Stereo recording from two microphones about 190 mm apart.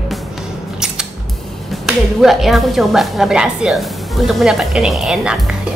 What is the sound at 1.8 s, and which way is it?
A woman's voice, centre (ahead or behind).